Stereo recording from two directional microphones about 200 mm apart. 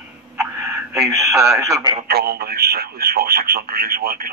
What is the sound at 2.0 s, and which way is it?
Speech, 50° right (ahead or behind).